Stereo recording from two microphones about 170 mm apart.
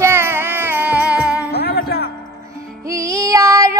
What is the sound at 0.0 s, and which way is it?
Music, 15° right (ahead or behind).